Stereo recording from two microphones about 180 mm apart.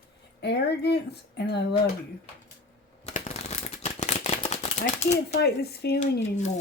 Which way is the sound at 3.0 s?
40° left (ahead or behind).